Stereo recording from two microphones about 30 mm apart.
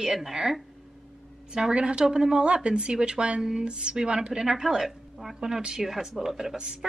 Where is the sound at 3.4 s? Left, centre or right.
Centre.